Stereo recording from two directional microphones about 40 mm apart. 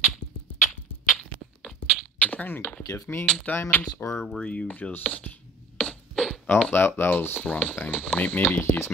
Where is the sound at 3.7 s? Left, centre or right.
Left.